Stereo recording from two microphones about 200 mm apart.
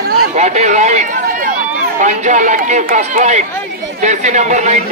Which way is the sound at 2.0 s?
35° right (ahead or behind).